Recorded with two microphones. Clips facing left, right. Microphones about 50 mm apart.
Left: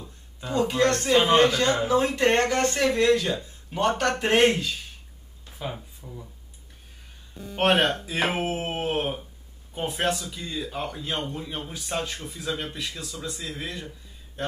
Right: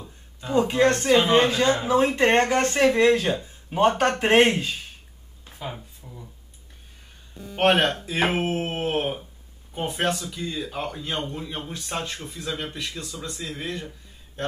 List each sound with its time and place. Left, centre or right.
0.0 s a sound: right
1.3 s speech: right
5.7 s speech: centre
7.5 s speech: centre